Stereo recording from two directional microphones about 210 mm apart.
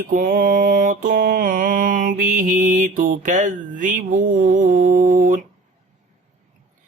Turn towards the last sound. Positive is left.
turn(degrees=-40)  # may be behind; listen again after turning